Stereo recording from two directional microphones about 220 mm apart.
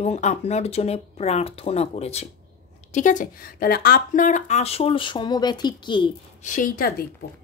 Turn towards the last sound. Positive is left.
turn(degrees=40)  # may be behind; listen again after turning